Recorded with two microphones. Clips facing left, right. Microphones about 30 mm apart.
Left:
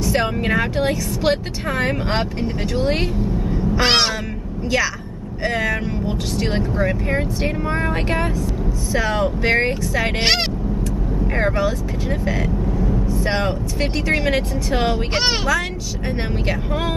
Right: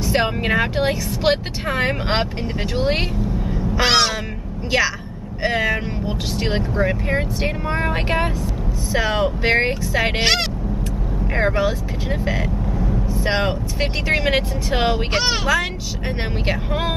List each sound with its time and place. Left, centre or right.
0.0 s speech: centre
3.8 s meow: centre
4.6 s a woman's voice: centre
11.3 s speech: centre
16.4 s speech: centre